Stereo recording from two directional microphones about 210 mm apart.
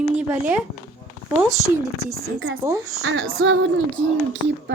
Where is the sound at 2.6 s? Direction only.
10° right (ahead or behind).